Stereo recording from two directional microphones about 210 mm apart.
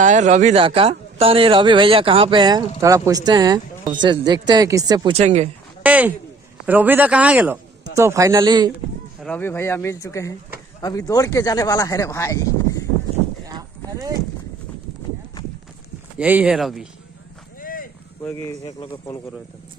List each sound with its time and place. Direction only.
0.0 s speech: 35° right (ahead or behind); by 5.1 s 20° right (ahead or behind)
5.1 s speech: 30° right (ahead or behind)
5.8 s speech: 5° right (ahead or behind)
9.2 s speech: 10° left (ahead or behind)
13.5 s clip-clop: 20° right (ahead or behind)
16.2 s speech: 5° right (ahead or behind)
17.6 s a sound: 40° left (ahead or behind)
18.3 s speech: 15° left (ahead or behind)